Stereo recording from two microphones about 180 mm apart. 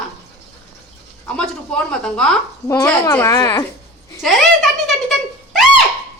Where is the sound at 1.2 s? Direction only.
5° left (ahead or behind).